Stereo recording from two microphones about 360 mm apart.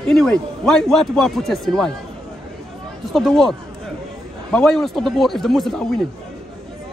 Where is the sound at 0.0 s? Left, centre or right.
Centre.